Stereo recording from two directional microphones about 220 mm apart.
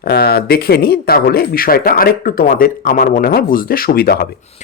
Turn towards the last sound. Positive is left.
turn(degrees=45)  # may be behind; listen again after turning